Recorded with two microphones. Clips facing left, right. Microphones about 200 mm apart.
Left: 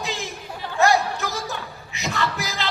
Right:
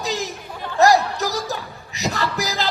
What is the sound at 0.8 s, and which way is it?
Speech, 40° right (ahead or behind).